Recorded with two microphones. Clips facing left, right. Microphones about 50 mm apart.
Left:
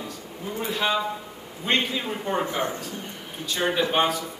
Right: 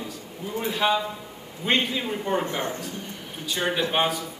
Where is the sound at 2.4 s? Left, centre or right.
Left.